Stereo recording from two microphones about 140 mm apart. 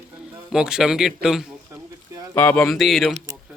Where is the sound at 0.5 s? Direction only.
5° right (ahead or behind).